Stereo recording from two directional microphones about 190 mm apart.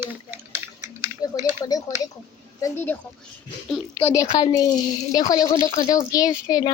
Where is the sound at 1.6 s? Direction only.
20° left (ahead or behind); by 4.1 s centre (ahead or behind).